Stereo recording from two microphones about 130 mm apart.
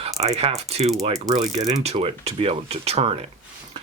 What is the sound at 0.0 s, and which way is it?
Speech, 55° right (ahead or behind).